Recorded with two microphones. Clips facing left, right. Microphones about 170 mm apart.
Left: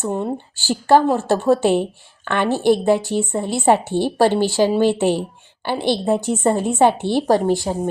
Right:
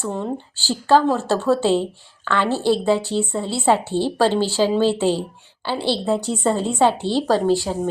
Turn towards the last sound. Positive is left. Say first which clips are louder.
# left 1 dB
turn(degrees=15)  # may be behind; listen again after turning